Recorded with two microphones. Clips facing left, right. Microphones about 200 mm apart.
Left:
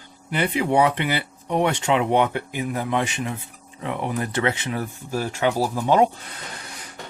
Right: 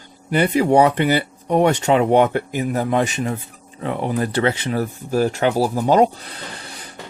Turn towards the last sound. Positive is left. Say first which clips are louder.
# right 3 dB
turn(degrees=-35)  # may be behind; listen again after turning